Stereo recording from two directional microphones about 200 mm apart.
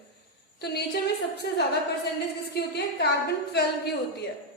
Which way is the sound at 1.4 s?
55° left (ahead or behind).